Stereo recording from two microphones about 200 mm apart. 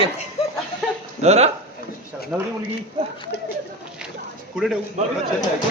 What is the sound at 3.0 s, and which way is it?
Speech, 30° right (ahead or behind).